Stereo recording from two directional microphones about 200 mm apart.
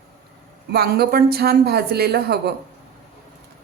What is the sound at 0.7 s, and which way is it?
A woman's voice, 50° right (ahead or behind).